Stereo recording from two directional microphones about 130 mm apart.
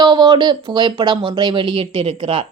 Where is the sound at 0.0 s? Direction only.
35° right (ahead or behind).